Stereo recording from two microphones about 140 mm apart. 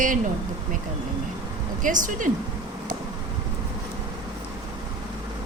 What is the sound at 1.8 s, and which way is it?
Speech, 70° right (ahead or behind).